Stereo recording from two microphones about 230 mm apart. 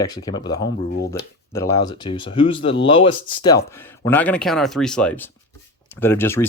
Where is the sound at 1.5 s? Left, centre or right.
Centre.